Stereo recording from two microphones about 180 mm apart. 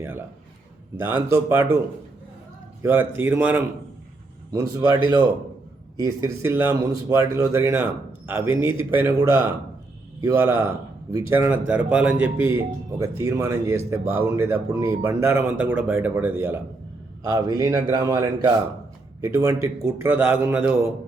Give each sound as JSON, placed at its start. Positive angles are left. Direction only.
{"t": 0.9, "sound": "speech", "side_deg": -15}
{"t": 2.8, "sound": "speech", "side_deg": -10}
{"t": 6.0, "sound": "speech", "side_deg": -15}